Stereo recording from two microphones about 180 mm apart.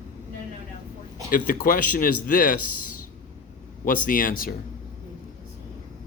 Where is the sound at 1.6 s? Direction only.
50° left (ahead or behind).